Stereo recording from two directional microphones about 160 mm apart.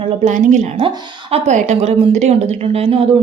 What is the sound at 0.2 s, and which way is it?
A woman's voice, 50° right (ahead or behind).